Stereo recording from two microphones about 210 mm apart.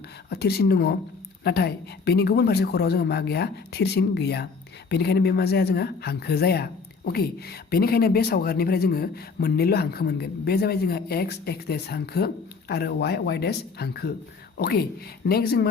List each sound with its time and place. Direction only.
0.3 s speech: 50° left (ahead or behind)